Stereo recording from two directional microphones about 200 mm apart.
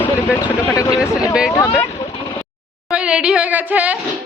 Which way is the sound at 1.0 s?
15° left (ahead or behind).